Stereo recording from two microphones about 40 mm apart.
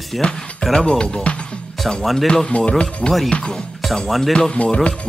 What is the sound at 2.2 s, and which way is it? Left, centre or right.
Speech, centre.